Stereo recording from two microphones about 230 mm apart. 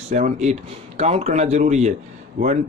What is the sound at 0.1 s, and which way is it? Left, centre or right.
Speech, right.